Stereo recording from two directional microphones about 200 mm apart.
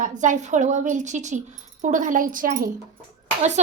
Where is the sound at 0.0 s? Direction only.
40° right (ahead or behind).